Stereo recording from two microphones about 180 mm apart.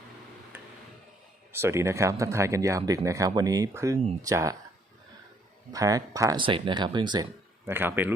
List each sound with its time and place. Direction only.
1.5 s speech: 15° right (ahead or behind)
5.7 s speech: 20° right (ahead or behind)
7.7 s speech: 10° right (ahead or behind)